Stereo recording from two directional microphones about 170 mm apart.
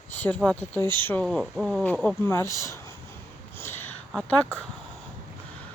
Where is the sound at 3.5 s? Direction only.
15° left (ahead or behind).